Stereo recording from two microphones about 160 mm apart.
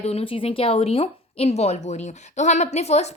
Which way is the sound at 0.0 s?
40° left (ahead or behind).